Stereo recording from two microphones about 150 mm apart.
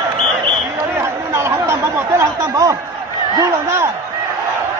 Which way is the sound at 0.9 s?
20° right (ahead or behind).